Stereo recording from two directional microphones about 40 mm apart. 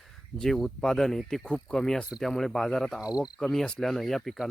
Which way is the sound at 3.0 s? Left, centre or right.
Right.